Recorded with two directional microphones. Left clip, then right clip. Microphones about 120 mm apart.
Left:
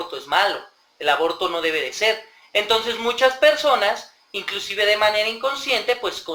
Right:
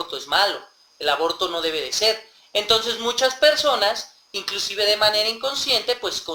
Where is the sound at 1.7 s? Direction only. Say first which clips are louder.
Left 1 dB; 40° right (ahead or behind).